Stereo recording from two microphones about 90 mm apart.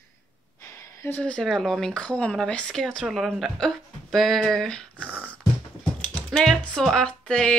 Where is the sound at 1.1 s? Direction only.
10° left (ahead or behind).